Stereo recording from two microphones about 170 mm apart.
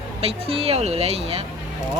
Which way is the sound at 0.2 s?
35° right (ahead or behind).